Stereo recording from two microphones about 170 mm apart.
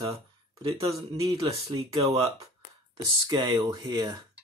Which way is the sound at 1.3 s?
30° right (ahead or behind).